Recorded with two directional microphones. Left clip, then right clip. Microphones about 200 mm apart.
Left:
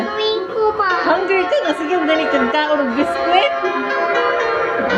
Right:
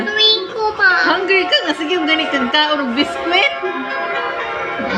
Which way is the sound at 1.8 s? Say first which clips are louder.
Even; 35° left (ahead or behind).